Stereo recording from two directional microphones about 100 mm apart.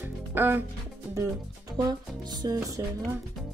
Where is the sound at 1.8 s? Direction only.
45° right (ahead or behind).